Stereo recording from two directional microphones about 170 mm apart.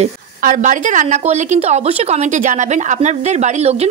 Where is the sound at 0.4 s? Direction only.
50° right (ahead or behind).